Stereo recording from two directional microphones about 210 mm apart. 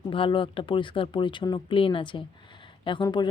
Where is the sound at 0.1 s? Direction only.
25° left (ahead or behind).